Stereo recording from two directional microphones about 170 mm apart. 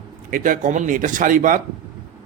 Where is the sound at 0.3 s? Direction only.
55° right (ahead or behind).